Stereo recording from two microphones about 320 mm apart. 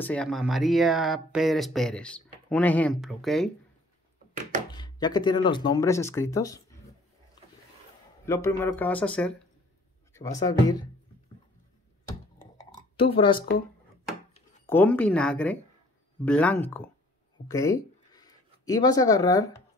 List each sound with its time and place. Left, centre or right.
0.0 s speech: centre
4.6 s speech: centre
8.3 s speech: centre
12.9 s speech: centre
14.7 s speech: centre